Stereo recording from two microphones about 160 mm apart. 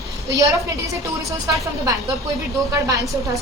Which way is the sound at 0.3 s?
20° right (ahead or behind).